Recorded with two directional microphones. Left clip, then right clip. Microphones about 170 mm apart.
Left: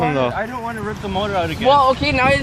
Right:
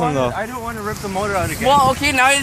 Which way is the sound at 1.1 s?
55° left (ahead or behind).